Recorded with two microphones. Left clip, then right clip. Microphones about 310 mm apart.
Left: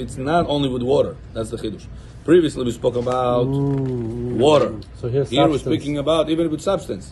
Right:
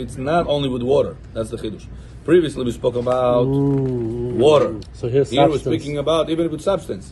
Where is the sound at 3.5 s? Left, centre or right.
Right.